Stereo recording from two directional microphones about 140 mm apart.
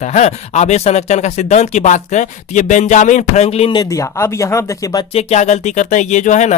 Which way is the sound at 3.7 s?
25° left (ahead or behind).